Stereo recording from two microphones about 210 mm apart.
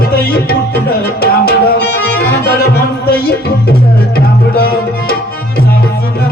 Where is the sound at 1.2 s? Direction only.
50° left (ahead or behind).